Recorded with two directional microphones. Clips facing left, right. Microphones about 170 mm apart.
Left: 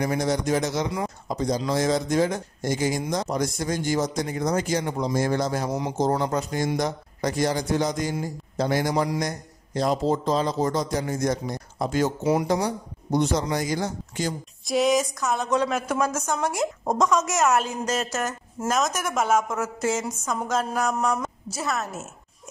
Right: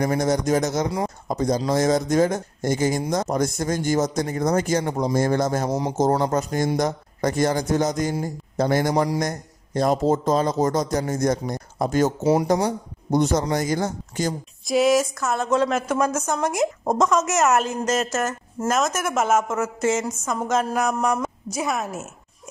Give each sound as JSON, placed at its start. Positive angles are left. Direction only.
{"t": 0.0, "sound": "speech", "side_deg": -45}
{"t": 14.6, "sound": "a woman's voice", "side_deg": 0}